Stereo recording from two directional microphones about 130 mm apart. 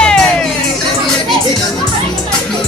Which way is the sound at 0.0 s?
5° left (ahead or behind).